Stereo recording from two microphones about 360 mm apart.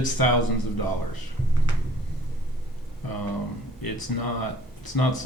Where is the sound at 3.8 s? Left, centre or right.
Left.